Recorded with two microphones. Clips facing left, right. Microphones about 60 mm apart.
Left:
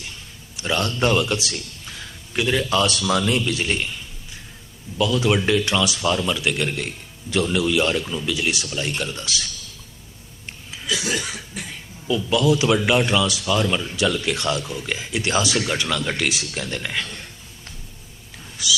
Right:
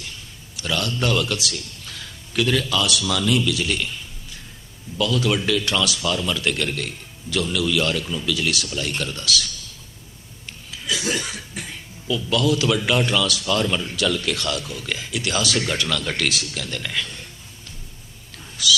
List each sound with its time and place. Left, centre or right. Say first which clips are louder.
0.5 s a man's voice: left 2 dB; left
1.9 s music: left 1 dB; centre
2.7 s speech: left 2 dB; left
4.9 s a man's voice: left 2 dB; centre
6.3 s a man's voice: left 1 dB; centre
12.0 s a man's voice: left 2 dB; left
15.5 s a man's voice: left 1 dB; centre
18.6 s a man's voice: right 3 dB; left